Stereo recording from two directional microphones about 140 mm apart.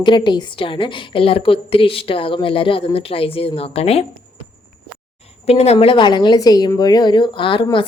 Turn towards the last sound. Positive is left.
turn(degrees=40)  # may be behind; listen again after turning